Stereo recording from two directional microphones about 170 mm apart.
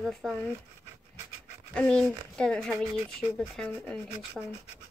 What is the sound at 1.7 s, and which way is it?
Speech, 5° left (ahead or behind).